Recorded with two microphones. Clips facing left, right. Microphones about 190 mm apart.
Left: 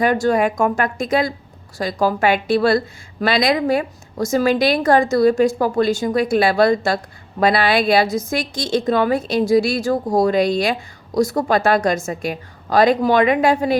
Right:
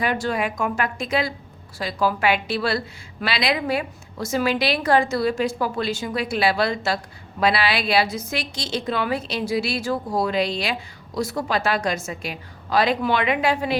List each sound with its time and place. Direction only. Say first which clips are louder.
0.0 s a woman's voice: left 7 dB; 45° left (ahead or behind)